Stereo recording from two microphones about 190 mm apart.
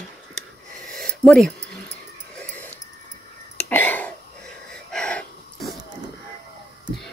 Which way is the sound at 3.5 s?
10° left (ahead or behind).